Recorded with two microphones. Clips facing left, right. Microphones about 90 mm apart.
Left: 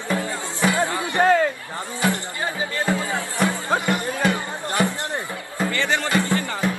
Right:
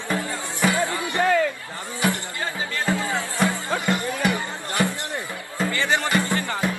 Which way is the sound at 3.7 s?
20° left (ahead or behind).